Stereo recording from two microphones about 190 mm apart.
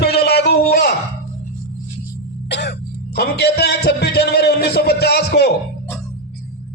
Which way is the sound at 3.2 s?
55° left (ahead or behind).